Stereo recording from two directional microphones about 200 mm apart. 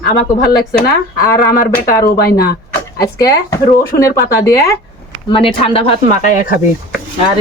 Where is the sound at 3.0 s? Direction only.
15° left (ahead or behind).